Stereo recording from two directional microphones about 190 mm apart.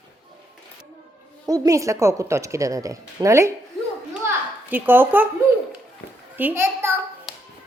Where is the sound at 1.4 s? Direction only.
20° right (ahead or behind).